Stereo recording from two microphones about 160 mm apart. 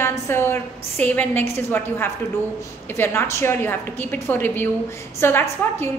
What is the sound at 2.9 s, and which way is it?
A woman's voice, 15° left (ahead or behind).